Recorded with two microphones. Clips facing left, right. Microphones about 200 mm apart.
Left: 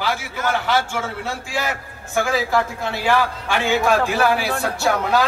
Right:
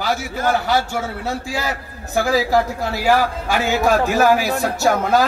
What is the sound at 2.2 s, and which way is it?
A man's voice, 35° right (ahead or behind).